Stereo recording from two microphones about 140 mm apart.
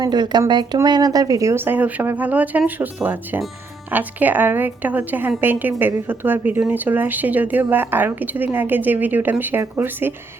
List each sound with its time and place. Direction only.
0.0 s speech: 30° right (ahead or behind); by 10.2 s 15° right (ahead or behind)